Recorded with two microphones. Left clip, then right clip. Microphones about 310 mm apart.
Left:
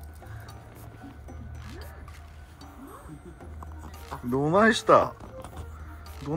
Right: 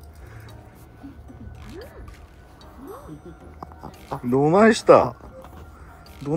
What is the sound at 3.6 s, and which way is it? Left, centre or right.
Music, right.